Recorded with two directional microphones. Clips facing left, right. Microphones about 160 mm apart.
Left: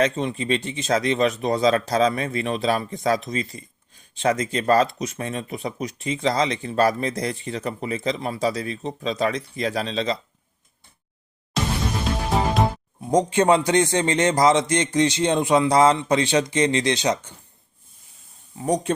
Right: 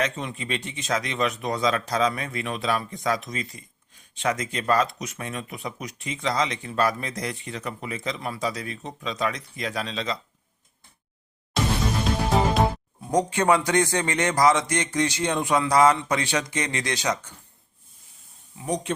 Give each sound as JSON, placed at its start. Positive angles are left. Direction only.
{"t": 0.0, "sound": "speech", "side_deg": 30}
{"t": 13.1, "sound": "speech", "side_deg": 25}
{"t": 18.5, "sound": "speech", "side_deg": 40}